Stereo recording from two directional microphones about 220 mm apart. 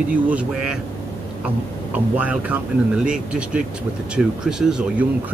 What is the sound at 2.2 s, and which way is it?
Speech, 5° right (ahead or behind).